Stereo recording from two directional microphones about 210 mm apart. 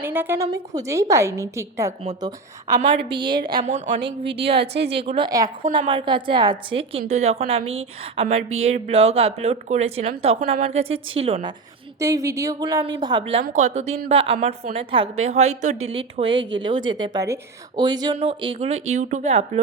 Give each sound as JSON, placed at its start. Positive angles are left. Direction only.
{"t": 0.0, "sound": "a woman's voice", "side_deg": -10}
{"t": 3.7, "sound": "a woman's voice", "side_deg": -35}
{"t": 4.6, "sound": "a woman's voice", "side_deg": -55}
{"t": 4.9, "sound": "a woman's voice", "side_deg": -25}
{"t": 11.9, "sound": "a woman's voice", "side_deg": -15}
{"t": 13.4, "sound": "a woman's voice", "side_deg": -35}